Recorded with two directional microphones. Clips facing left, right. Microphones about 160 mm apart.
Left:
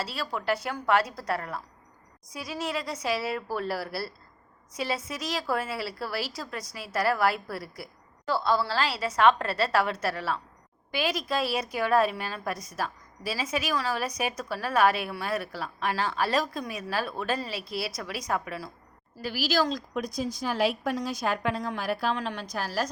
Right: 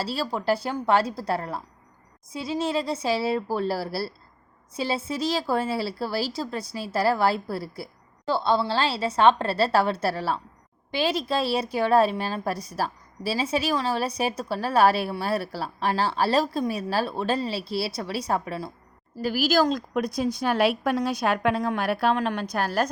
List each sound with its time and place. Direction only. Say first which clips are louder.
0.0 s a woman's voice: right 5 dB; 30° right (ahead or behind)
19.2 s a woman's voice: right 5 dB; 45° right (ahead or behind)